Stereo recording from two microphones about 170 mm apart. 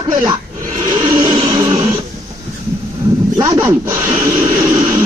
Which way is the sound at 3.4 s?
15° right (ahead or behind).